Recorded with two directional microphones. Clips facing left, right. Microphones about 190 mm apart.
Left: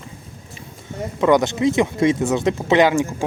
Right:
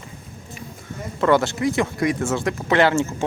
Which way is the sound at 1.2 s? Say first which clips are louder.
Left 2 dB; 15° left (ahead or behind).